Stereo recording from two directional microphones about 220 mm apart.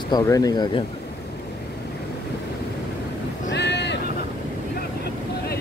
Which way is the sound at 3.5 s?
50° left (ahead or behind).